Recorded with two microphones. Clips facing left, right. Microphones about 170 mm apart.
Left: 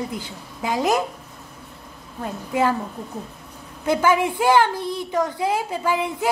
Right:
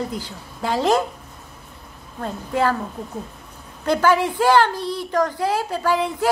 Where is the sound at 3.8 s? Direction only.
10° left (ahead or behind).